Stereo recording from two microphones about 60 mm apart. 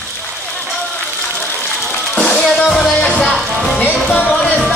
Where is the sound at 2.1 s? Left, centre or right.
Centre.